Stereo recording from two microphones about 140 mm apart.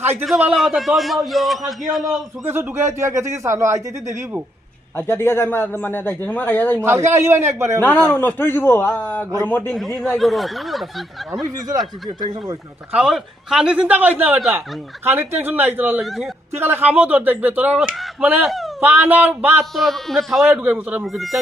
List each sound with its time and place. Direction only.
0.3 s a man's voice: 5° right (ahead or behind)
2.5 s speech: 15° right (ahead or behind)
4.9 s a man's voice: 15° left (ahead or behind)
6.8 s speech: 20° right (ahead or behind)
8.1 s a man's voice: 15° left (ahead or behind)
11.7 s speech: 30° right (ahead or behind)
12.9 s speech: 5° right (ahead or behind)
16.0 s a man's voice: centre (ahead or behind)
16.6 s speech: 15° right (ahead or behind)
18.4 s speech: centre (ahead or behind)
18.8 s speech: 10° right (ahead or behind)
19.7 s a man's voice: centre (ahead or behind)
20.5 s speech: 15° right (ahead or behind)